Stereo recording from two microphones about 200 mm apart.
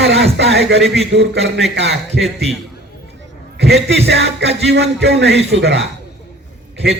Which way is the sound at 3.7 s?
55° right (ahead or behind).